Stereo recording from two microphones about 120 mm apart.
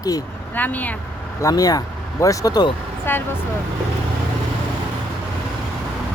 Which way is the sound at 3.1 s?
20° left (ahead or behind).